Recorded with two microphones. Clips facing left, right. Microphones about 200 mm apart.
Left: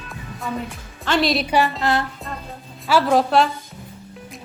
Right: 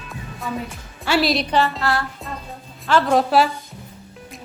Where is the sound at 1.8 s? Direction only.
20° left (ahead or behind).